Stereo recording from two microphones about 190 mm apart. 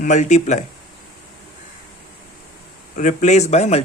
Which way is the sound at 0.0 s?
40° left (ahead or behind).